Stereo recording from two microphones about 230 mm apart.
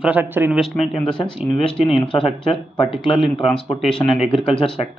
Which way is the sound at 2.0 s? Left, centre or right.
Left.